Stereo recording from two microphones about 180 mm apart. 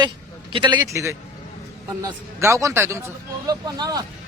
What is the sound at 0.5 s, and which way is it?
A man's voice, 25° right (ahead or behind).